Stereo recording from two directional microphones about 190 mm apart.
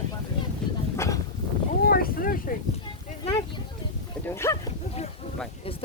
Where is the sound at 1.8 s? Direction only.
50° left (ahead or behind).